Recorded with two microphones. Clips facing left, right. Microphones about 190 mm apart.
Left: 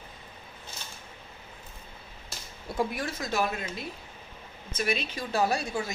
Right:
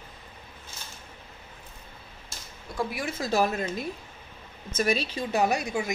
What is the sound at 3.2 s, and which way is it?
Speech, 35° right (ahead or behind).